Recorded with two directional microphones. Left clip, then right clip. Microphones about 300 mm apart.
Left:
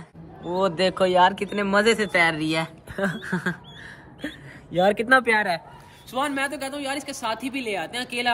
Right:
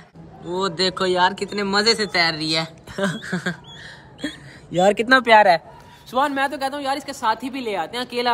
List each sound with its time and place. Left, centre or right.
0.5 s speech: centre
2.9 s a sound: right
3.3 s speech: centre
4.2 s speech: right
6.1 s speech: centre